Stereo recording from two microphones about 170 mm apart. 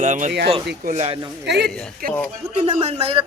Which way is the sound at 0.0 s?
50° right (ahead or behind).